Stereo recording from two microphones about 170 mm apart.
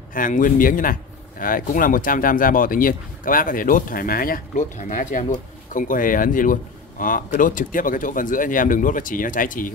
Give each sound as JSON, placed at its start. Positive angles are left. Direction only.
{"t": 0.1, "sound": "speech", "side_deg": 55}